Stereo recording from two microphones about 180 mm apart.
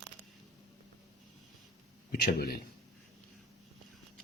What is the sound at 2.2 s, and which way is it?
Speech, 60° left (ahead or behind).